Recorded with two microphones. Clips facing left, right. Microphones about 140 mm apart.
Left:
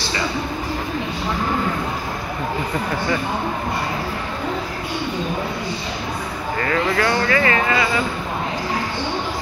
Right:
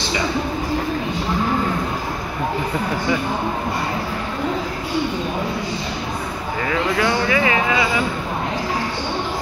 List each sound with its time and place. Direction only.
6.6 s speech: 5° right (ahead or behind)